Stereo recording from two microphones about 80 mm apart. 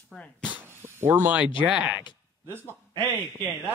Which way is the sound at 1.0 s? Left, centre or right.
Right.